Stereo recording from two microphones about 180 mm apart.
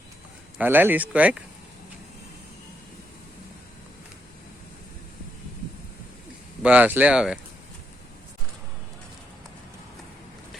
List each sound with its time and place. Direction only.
0.6 s speech: 10° right (ahead or behind)
6.6 s speech: 10° right (ahead or behind)